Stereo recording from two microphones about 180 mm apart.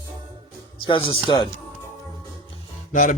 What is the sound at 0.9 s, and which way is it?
Speech, 30° left (ahead or behind).